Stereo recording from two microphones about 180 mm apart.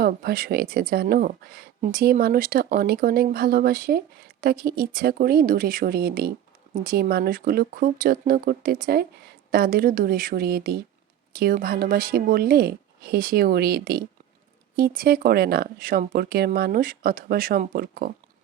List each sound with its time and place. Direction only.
0.0 s speech: 60° right (ahead or behind)